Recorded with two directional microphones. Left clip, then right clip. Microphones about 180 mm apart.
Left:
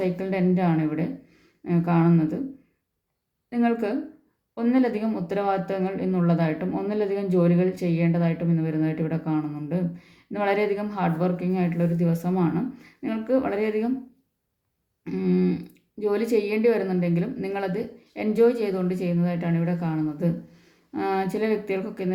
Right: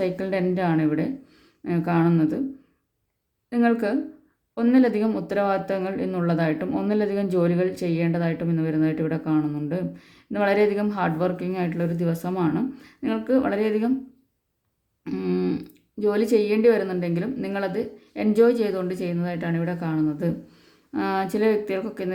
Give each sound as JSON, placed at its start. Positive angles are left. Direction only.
{"t": 0.0, "sound": "speech", "side_deg": -30}
{"t": 3.5, "sound": "speech", "side_deg": -30}
{"t": 15.0, "sound": "speech", "side_deg": -30}